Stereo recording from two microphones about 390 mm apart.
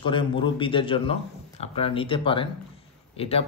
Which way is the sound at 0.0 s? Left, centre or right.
Centre.